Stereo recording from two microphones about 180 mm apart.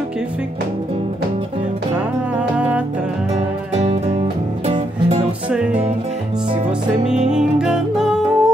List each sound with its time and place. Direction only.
2.5 s music: 10° right (ahead or behind)
4.6 s music: 35° right (ahead or behind)
7.2 s music: 5° right (ahead or behind)